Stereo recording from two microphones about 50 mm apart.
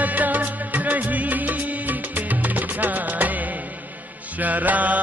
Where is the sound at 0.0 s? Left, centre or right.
Right.